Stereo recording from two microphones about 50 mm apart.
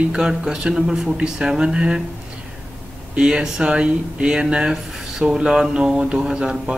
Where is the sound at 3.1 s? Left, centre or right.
Centre.